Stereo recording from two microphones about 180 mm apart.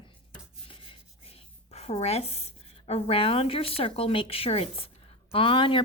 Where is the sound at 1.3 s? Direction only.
35° left (ahead or behind).